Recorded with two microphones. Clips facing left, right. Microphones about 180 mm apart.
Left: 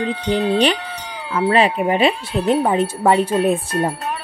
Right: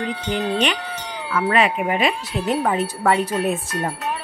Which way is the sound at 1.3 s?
30° left (ahead or behind).